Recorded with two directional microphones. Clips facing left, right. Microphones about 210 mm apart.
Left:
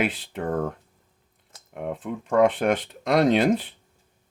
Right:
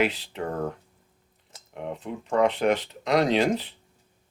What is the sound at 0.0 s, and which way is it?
Speech, 50° left (ahead or behind).